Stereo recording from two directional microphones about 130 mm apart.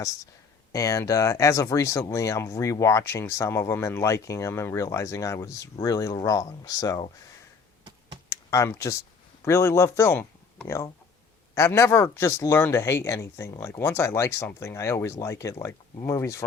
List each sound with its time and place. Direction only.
0.7 s speech: 25° left (ahead or behind)
8.3 s computer keyboard: 25° left (ahead or behind)
9.4 s speech: 20° left (ahead or behind)